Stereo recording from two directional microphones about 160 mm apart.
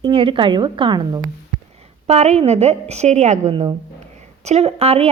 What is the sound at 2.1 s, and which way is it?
A woman's voice, 40° right (ahead or behind).